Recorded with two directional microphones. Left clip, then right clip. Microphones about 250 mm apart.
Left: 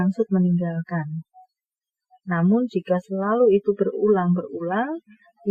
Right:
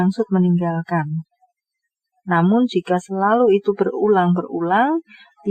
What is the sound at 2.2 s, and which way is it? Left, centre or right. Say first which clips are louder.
Speech: right 6 dB; right.